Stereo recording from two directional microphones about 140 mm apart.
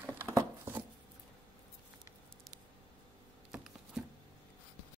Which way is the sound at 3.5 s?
5° right (ahead or behind).